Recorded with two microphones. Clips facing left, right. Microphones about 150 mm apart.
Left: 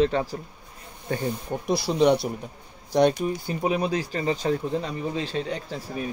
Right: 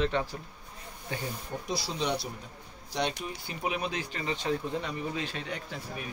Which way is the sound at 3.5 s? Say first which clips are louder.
Left 6 dB; 35° left (ahead or behind).